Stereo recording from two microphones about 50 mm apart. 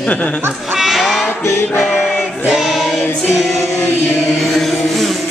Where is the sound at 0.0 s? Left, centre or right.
Left.